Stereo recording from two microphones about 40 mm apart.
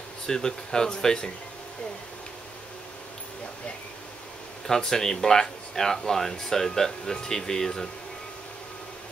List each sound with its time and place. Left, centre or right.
0.3 s speech: centre
4.6 s speech: centre